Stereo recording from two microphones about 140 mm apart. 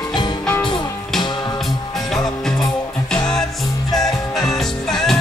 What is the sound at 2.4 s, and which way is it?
Music, 5° left (ahead or behind).